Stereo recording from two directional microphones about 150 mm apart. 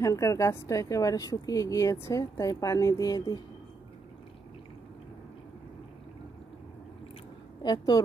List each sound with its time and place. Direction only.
0.0 s a woman's voice: 20° left (ahead or behind)
7.6 s a woman's voice: 30° left (ahead or behind)